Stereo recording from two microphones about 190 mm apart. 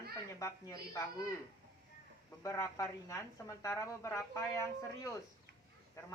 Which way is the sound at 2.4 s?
15° left (ahead or behind).